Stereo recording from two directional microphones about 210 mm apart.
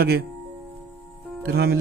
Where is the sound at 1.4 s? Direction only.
50° right (ahead or behind).